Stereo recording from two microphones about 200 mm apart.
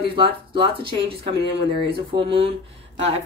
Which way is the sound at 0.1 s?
25° right (ahead or behind).